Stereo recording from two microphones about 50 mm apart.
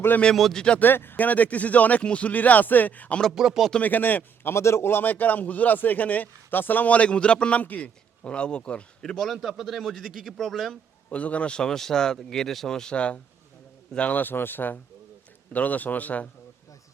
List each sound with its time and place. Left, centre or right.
0.5 s speech: centre
0.8 s speech: left
1.1 s a man's voice: left
3.3 s speech: centre
3.8 s a man's voice: left
4.4 s a man's voice: left
9.0 s speech: centre
9.4 s speech: centre
11.1 s speech: left
14.1 s a man's voice: left